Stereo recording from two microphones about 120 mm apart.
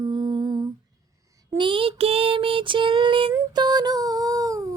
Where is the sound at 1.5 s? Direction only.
45° right (ahead or behind).